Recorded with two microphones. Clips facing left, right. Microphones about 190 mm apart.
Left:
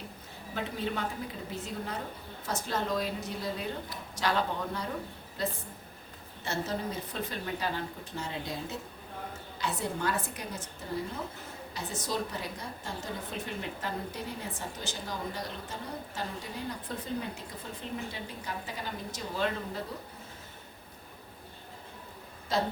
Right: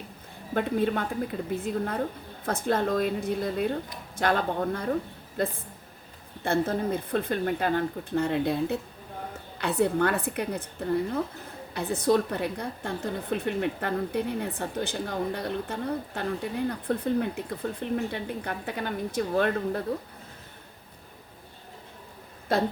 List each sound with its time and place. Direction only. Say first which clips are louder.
0.5 s a woman's voice: right 9 dB; 55° right (ahead or behind)
22.5 s a woman's voice: right 5 dB; 55° right (ahead or behind)